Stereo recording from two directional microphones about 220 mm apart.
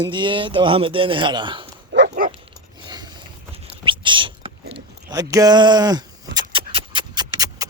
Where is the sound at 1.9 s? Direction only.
50° right (ahead or behind).